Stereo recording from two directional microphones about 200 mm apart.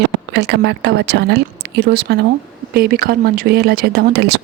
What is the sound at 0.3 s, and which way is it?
A woman's voice, 60° right (ahead or behind).